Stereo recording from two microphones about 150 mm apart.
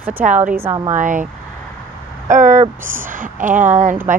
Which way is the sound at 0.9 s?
60° right (ahead or behind).